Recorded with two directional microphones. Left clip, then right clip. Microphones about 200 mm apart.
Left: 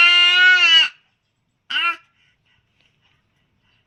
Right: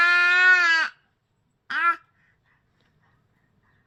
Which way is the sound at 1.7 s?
5° right (ahead or behind).